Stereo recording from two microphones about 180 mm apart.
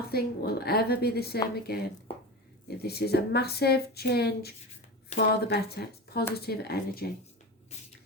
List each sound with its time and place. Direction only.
0.1 s a woman's voice: 60° left (ahead or behind)
2.1 s a sound: 30° left (ahead or behind)
2.6 s a woman's voice: 60° left (ahead or behind)
5.1 s speech: 35° left (ahead or behind)
5.5 s a woman's voice: 65° left (ahead or behind)